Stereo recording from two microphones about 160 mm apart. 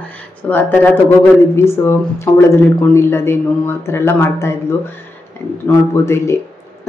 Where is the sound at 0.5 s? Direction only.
15° left (ahead or behind).